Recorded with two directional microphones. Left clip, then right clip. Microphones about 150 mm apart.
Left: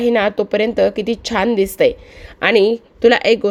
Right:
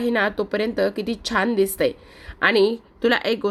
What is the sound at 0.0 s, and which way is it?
A woman's voice, 20° left (ahead or behind).